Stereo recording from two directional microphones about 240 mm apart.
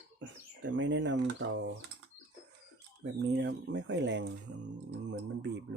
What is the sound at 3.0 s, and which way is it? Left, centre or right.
Speech, right.